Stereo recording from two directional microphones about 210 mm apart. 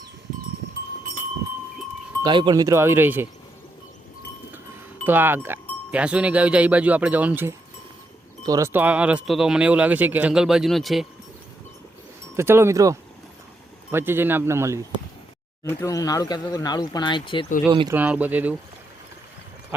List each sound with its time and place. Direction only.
2.2 s speech: 20° right (ahead or behind)
5.0 s speech: 10° right (ahead or behind)
12.4 s speech: 10° right (ahead or behind)
15.6 s speech: 15° left (ahead or behind)
17.7 s speech: 20° right (ahead or behind)
17.9 s speech: 10° right (ahead or behind)